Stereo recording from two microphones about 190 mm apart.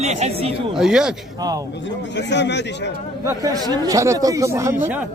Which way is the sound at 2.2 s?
65° left (ahead or behind).